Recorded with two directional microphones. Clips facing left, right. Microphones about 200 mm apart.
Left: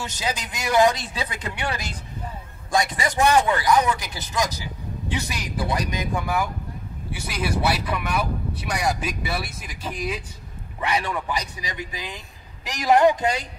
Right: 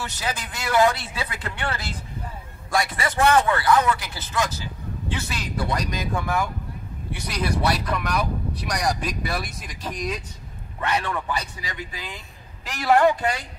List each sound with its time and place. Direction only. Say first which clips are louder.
0.0 s a man's voice: left 1 dB; 20° left (ahead or behind)